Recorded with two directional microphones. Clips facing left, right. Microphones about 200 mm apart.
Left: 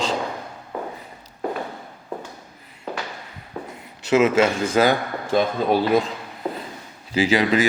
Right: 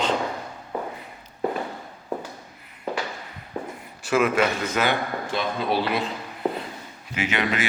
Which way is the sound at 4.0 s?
20° left (ahead or behind).